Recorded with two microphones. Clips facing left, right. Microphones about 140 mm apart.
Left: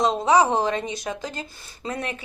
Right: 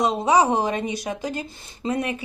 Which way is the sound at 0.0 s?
15° right (ahead or behind).